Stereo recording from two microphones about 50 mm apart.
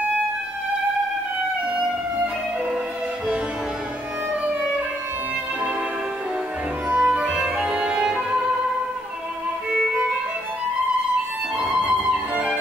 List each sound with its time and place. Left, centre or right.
6.9 s music: right
9.7 s music: centre
11.6 s music: centre